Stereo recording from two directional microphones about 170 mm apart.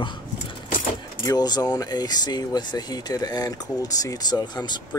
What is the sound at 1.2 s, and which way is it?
Speech, 25° left (ahead or behind).